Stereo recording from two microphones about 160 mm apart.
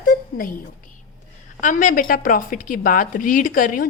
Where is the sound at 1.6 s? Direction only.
55° left (ahead or behind).